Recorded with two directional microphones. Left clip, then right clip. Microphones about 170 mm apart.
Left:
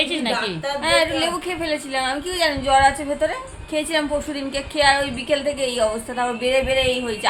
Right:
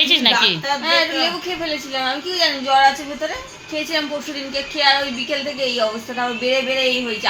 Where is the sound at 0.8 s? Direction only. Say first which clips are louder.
Left 2 dB; 30° left (ahead or behind).